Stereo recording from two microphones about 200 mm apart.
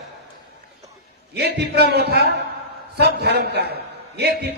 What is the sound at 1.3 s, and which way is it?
A man's voice, 55° right (ahead or behind).